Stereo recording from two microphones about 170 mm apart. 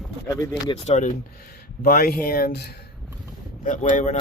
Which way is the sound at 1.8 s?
60° left (ahead or behind).